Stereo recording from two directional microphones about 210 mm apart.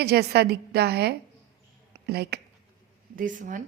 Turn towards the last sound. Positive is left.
turn(degrees=-40)  # may be behind; listen again after turning